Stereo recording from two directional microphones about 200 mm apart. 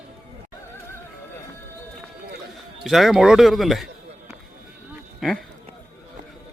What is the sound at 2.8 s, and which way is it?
A man's voice, centre (ahead or behind).